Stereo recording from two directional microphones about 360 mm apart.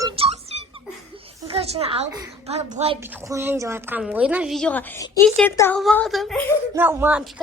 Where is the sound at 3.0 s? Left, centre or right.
Centre.